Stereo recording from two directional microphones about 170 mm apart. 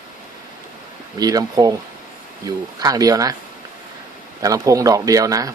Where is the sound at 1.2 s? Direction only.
20° right (ahead or behind).